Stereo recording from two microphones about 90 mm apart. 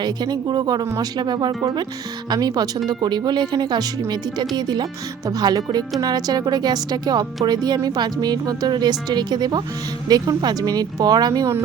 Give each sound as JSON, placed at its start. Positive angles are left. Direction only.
{"t": 0.0, "sound": "a woman's voice", "side_deg": -50}